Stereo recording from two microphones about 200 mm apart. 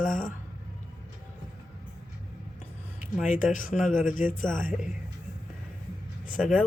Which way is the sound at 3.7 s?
Centre (ahead or behind).